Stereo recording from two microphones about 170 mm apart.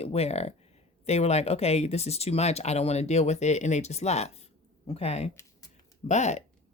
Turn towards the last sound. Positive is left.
turn(degrees=40)  # may be behind; listen again after turning